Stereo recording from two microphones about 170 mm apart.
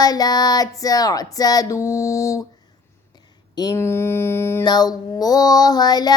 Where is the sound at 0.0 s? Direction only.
20° left (ahead or behind).